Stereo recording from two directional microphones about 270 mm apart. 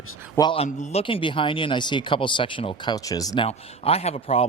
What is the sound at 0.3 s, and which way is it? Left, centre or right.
A man's voice, centre.